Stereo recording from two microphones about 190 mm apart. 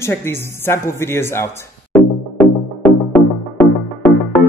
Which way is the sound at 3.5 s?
5° left (ahead or behind).